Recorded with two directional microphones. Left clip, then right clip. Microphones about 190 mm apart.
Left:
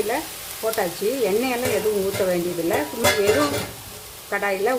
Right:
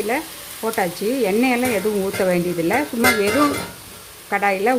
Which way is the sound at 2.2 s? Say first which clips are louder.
Right 4 dB; 35° right (ahead or behind).